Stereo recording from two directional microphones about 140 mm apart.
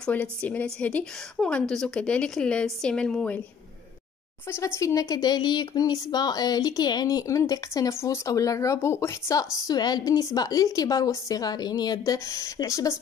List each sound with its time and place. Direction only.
0.0 s a woman's voice: 10° left (ahead or behind)
4.5 s speech: 20° left (ahead or behind)